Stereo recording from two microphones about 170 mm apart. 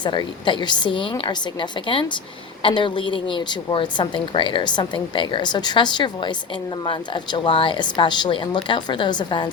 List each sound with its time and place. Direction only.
0.0 s a woman's voice: 25° left (ahead or behind)